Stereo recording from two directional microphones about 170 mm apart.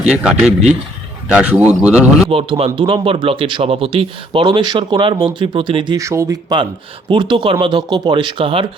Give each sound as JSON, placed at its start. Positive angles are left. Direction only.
{"t": 0.2, "sound": "a man's voice", "side_deg": -5}
{"t": 2.3, "sound": "speech", "side_deg": -35}